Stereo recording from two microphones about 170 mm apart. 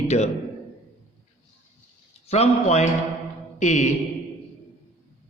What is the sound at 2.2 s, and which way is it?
A man's voice, 40° left (ahead or behind).